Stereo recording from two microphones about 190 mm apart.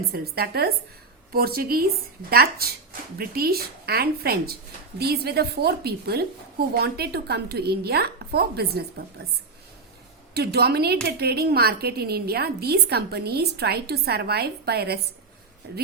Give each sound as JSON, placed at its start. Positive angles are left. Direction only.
{"t": 0.1, "sound": "a woman's voice", "side_deg": -55}
{"t": 10.3, "sound": "a woman's voice", "side_deg": -55}